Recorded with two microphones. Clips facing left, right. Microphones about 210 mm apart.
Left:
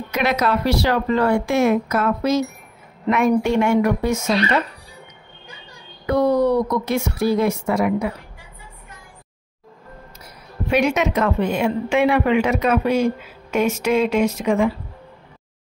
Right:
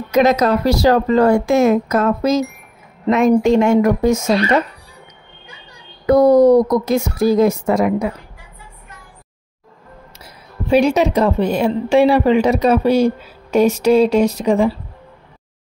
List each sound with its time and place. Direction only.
0.1 s a woman's voice: 40° right (ahead or behind)
6.0 s a woman's voice: 40° right (ahead or behind)
10.2 s a woman's voice: 30° right (ahead or behind)